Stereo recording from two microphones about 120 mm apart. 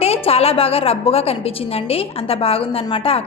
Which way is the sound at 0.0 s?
55° left (ahead or behind).